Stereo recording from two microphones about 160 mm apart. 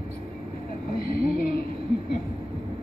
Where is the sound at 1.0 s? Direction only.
65° left (ahead or behind).